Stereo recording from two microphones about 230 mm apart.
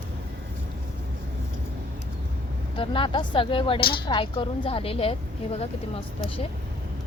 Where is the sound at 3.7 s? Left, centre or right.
Left.